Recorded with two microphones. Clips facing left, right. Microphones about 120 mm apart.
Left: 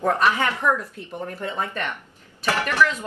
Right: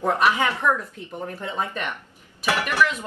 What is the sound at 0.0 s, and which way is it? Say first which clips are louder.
A woman's voice: even; 15° right (ahead or behind).